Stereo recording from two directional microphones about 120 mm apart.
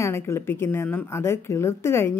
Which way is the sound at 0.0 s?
20° left (ahead or behind).